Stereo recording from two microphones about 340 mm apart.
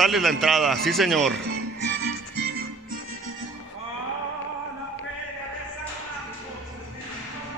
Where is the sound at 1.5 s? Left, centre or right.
Right.